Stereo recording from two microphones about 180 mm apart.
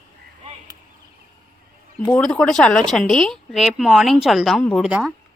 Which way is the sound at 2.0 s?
5° left (ahead or behind).